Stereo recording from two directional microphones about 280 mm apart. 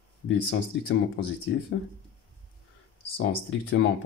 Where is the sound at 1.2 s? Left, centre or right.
Left.